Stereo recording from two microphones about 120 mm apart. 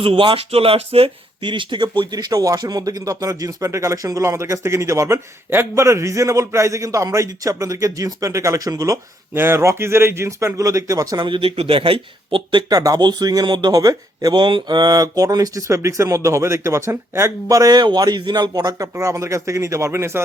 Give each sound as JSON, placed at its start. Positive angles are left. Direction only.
{"t": 0.0, "sound": "speech", "side_deg": -45}
{"t": 11.2, "sound": "speech", "side_deg": -45}